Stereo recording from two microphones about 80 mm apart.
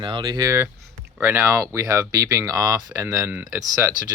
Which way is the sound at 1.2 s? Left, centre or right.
Right.